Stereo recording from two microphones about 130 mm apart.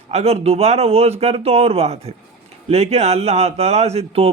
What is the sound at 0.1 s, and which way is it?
Speech, 55° right (ahead or behind).